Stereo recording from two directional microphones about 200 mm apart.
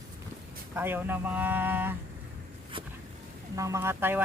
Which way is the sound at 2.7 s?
25° right (ahead or behind).